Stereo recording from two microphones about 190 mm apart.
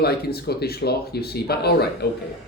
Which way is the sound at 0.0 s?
55° left (ahead or behind).